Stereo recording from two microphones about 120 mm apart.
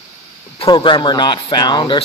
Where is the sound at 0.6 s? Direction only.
45° left (ahead or behind).